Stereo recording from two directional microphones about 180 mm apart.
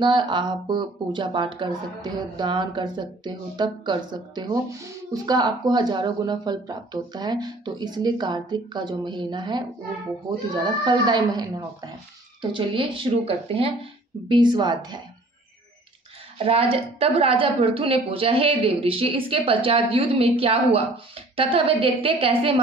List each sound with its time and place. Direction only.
0.0 s speech: 25° right (ahead or behind)
16.3 s a woman's voice: 35° right (ahead or behind)